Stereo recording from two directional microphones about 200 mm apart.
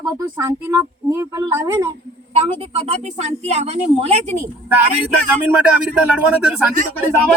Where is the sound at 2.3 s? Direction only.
30° right (ahead or behind).